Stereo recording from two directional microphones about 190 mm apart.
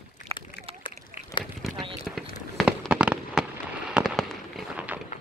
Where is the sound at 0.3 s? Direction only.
30° right (ahead or behind).